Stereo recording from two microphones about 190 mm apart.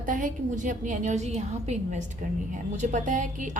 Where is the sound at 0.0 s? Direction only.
45° right (ahead or behind).